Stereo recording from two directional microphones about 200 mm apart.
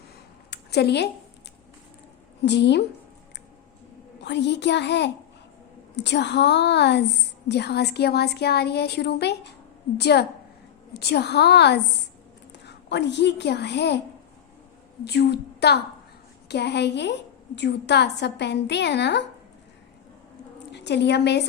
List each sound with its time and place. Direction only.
0.5 s a sound: 55° left (ahead or behind)
2.4 s a woman's voice: 60° left (ahead or behind)
4.2 s a woman's voice: 60° left (ahead or behind)
15.0 s a woman's voice: 55° left (ahead or behind)
20.7 s a woman's voice: 60° left (ahead or behind)